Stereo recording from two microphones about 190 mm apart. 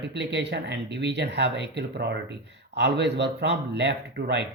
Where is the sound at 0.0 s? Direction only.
65° right (ahead or behind).